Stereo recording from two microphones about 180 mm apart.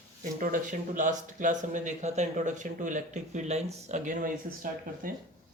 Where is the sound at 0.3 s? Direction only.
45° right (ahead or behind).